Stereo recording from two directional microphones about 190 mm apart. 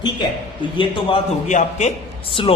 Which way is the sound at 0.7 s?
25° left (ahead or behind).